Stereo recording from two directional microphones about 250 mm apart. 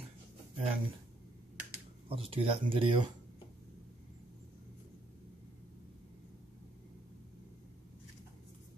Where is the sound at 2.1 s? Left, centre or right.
Right.